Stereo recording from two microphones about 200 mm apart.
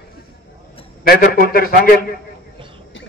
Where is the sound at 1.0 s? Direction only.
45° left (ahead or behind).